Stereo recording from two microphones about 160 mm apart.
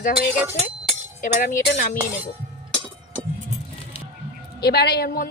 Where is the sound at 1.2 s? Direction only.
65° left (ahead or behind).